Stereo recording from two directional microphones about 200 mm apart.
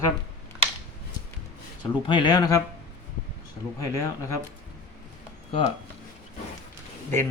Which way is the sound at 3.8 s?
15° left (ahead or behind).